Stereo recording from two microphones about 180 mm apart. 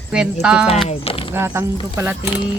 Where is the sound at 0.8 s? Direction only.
30° left (ahead or behind).